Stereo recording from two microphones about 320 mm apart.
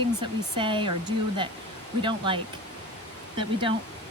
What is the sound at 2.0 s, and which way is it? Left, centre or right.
Speech, centre.